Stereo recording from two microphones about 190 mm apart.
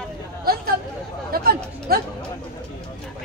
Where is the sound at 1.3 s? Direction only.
50° right (ahead or behind).